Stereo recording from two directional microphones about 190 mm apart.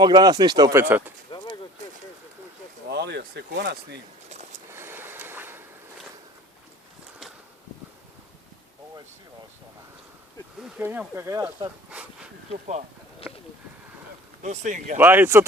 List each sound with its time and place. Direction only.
0.0 s speech: 20° right (ahead or behind)
2.9 s speech: 60° right (ahead or behind)
4.3 s vehicle: 35° right (ahead or behind)
4.7 s boat: 10° right (ahead or behind)
10.6 s speech: 10° right (ahead or behind)
12.5 s speech: 35° right (ahead or behind)
14.4 s speech: 40° right (ahead or behind)
14.9 s speech: 10° right (ahead or behind)